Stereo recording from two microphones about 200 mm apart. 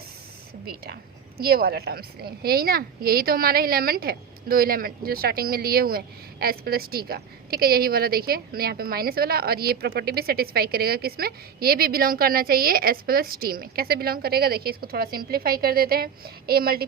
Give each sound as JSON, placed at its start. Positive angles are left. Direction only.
{"t": 0.6, "sound": "a woman's voice", "side_deg": -50}